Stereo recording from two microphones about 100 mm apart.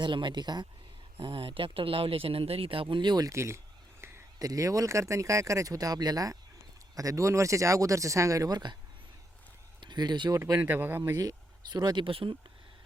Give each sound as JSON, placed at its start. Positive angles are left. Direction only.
{"t": 0.0, "sound": "speech", "side_deg": -50}
{"t": 1.1, "sound": "speech", "side_deg": -65}
{"t": 3.2, "sound": "speech", "side_deg": -30}
{"t": 9.8, "sound": "speech", "side_deg": -45}
{"t": 10.3, "sound": "speech", "side_deg": -30}
{"t": 10.6, "sound": "speech", "side_deg": -20}
{"t": 11.2, "sound": "speech", "side_deg": -40}
{"t": 12.0, "sound": "speech", "side_deg": -60}